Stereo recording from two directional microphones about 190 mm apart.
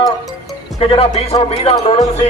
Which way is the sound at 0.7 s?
30° left (ahead or behind).